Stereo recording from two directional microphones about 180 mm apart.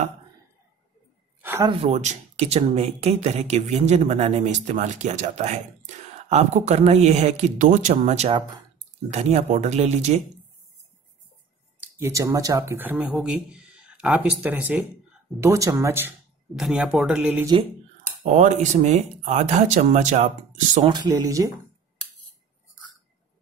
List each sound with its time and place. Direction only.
1.4 s a sound: 10° right (ahead or behind)
1.7 s speech: 35° right (ahead or behind)
12.0 s speech: 20° right (ahead or behind)
16.5 s speech: 5° right (ahead or behind)
18.3 s speech: 40° right (ahead or behind)
20.9 s speech: 20° right (ahead or behind)